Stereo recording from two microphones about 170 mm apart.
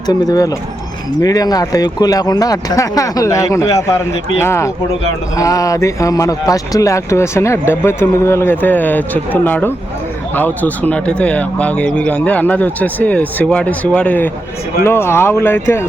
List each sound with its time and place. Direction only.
0.1 s speech: 20° left (ahead or behind)